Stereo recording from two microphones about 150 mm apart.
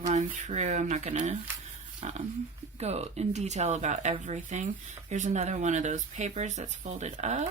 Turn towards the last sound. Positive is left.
turn(degrees=-50)  # may be behind; listen again after turning